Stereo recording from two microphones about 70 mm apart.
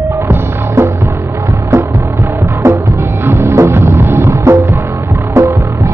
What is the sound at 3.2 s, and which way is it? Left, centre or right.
Music, right.